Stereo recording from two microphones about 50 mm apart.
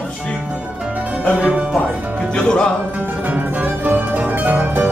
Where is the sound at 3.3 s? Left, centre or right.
Right.